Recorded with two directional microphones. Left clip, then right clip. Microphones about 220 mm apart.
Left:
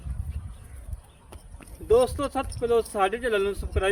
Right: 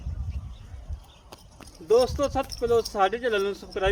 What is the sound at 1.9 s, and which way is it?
Speech, centre (ahead or behind).